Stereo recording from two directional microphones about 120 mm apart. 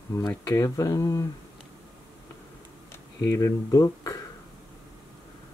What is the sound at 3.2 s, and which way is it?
Speech, 30° left (ahead or behind).